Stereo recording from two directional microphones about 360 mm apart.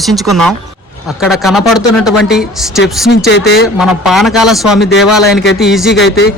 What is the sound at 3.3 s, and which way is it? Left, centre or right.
Speech, left.